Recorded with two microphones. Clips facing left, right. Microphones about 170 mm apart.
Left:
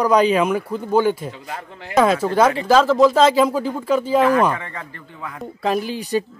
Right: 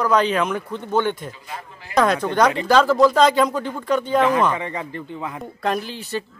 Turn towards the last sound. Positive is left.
turn(degrees=15)  # may be behind; listen again after turning